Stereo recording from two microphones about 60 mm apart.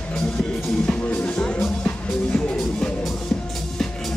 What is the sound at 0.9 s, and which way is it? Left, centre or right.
Music, left.